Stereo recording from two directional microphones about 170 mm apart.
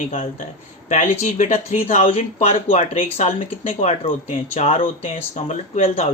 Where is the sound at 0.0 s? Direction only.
45° left (ahead or behind).